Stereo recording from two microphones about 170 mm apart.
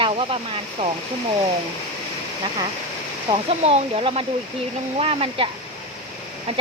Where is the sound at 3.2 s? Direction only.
35° right (ahead or behind).